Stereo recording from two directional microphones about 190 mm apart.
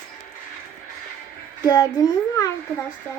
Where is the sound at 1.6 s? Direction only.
20° left (ahead or behind).